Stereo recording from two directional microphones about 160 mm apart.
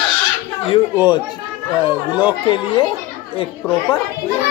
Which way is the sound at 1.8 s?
10° right (ahead or behind).